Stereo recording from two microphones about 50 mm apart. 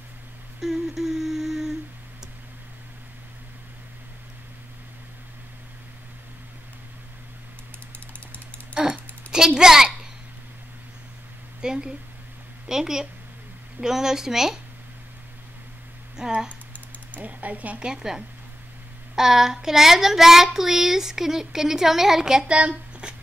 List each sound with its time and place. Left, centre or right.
0.6 s humming: centre
8.8 s a sound: right
11.6 s a woman's voice: centre
13.7 s child singing: centre
16.2 s speech: centre
17.2 s a sound: right
17.7 s child singing: centre